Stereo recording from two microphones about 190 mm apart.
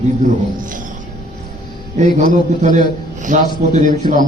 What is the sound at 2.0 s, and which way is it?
A man's voice, 40° right (ahead or behind).